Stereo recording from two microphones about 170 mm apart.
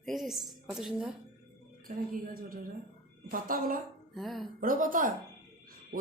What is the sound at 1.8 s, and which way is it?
A woman's voice, 55° right (ahead or behind).